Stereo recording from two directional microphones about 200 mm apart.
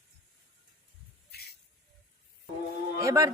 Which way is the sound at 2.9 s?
15° right (ahead or behind).